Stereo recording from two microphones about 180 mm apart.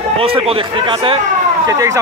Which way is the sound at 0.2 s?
35° right (ahead or behind).